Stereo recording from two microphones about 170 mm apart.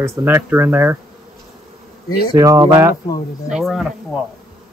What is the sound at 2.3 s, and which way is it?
Speech, 20° right (ahead or behind).